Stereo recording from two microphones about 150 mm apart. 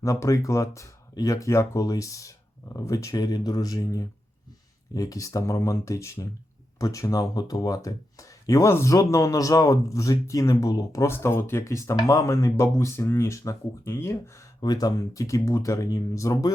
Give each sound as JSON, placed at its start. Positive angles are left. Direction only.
{"t": 0.0, "sound": "speech", "side_deg": 20}